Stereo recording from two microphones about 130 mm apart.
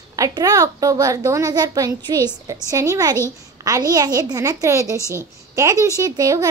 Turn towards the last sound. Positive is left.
turn(degrees=-25)  # may be behind; listen again after turning